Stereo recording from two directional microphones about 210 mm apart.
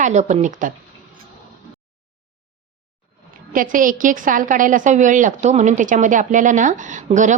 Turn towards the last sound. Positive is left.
turn(degrees=-35)  # may be behind; listen again after turning